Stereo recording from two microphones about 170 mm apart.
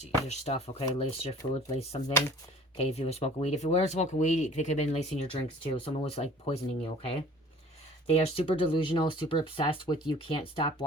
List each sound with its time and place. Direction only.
0.0 s speech: 40° left (ahead or behind)